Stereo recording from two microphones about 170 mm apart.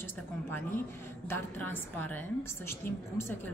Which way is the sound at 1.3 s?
10° left (ahead or behind).